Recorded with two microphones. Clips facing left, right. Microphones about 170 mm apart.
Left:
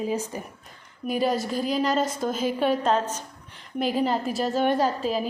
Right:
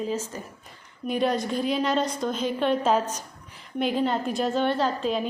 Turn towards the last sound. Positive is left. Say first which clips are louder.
# left 1 dB
turn(degrees=5)  # may be behind; listen again after turning